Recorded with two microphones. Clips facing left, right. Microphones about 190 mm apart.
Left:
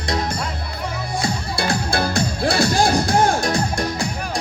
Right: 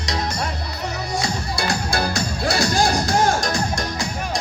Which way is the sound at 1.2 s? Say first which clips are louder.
Left 4 dB; 55° left (ahead or behind).